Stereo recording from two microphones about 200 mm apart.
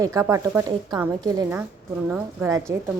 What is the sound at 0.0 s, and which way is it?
Speech, 15° right (ahead or behind).